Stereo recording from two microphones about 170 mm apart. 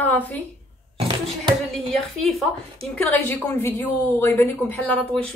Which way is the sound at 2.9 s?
10° left (ahead or behind).